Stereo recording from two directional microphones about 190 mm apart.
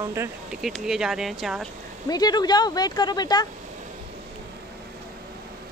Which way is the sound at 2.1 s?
20° left (ahead or behind).